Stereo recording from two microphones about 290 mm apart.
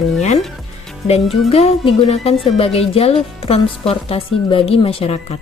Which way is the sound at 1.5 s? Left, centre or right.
Left.